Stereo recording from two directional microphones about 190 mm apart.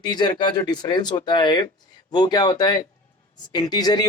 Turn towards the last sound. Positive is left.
turn(degrees=20)  # may be behind; listen again after turning